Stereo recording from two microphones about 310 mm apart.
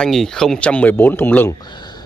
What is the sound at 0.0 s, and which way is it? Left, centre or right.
Speech, centre.